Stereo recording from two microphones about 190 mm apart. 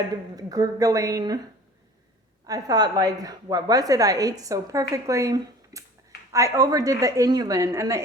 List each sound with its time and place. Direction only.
0.3 s a woman's voice: 20° right (ahead or behind)
2.5 s a woman's voice: 20° right (ahead or behind)